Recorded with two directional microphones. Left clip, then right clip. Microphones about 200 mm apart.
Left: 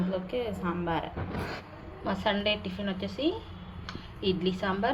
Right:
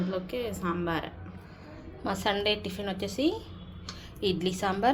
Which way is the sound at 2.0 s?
55° right (ahead or behind).